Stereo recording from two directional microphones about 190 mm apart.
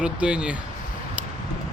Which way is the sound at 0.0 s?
5° right (ahead or behind).